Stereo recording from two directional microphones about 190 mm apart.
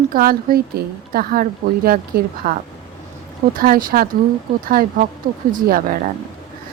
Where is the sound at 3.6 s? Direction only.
50° right (ahead or behind).